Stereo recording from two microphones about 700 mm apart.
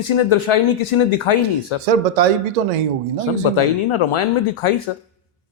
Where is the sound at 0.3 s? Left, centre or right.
Left.